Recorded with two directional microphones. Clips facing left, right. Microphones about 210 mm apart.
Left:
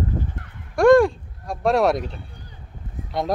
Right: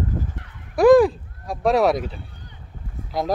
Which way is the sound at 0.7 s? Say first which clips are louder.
Right 1 dB; centre (ahead or behind).